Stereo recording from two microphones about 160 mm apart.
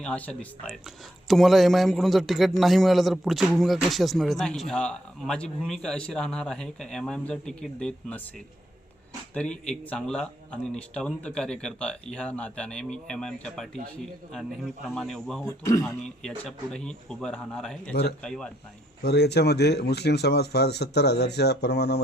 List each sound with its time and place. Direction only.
0.0 s speech: 10° left (ahead or behind)
9.3 s speech: 5° left (ahead or behind)
15.4 s speech: 20° left (ahead or behind)
16.0 s speech: 5° left (ahead or behind)
19.0 s speech: 90° left